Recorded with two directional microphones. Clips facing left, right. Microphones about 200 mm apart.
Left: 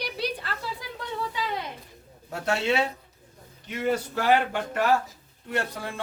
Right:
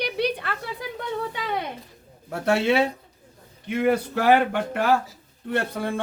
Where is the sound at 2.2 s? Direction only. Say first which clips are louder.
Right 5 dB; 55° right (ahead or behind).